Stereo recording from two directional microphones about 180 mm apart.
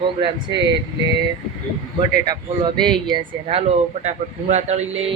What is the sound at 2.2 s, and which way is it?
Speech, 25° right (ahead or behind).